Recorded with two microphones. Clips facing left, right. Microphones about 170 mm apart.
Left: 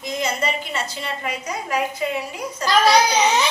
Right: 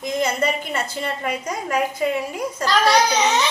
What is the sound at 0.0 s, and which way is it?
A woman's voice, 50° right (ahead or behind).